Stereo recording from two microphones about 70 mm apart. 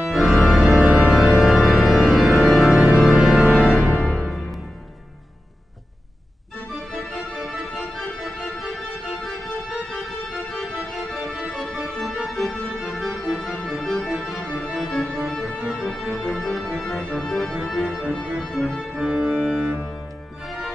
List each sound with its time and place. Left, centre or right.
0.3 s organ: centre
2.8 s music: centre
6.9 s music: centre
10.5 s organ: centre
14.1 s music: centre
18.0 s music: centre
18.4 s music: centre
18.9 s organ: centre
20.4 s music: centre